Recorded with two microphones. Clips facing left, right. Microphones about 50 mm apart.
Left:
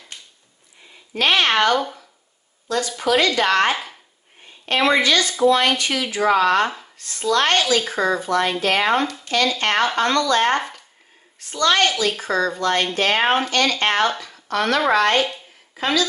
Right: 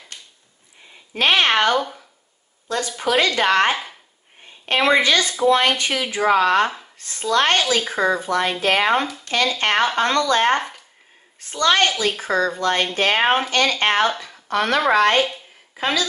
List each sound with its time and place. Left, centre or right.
1.1 s a woman's voice: right
1.5 s speech: centre
3.0 s speech: right
4.7 s speech: centre
7.8 s a woman's voice: centre